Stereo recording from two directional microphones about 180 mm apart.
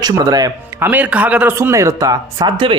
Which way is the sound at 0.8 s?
10° right (ahead or behind).